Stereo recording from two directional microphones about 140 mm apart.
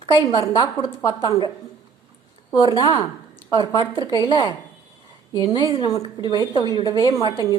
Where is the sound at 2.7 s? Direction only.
30° left (ahead or behind).